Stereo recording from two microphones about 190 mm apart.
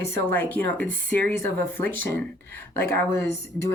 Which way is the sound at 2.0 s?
55° right (ahead or behind).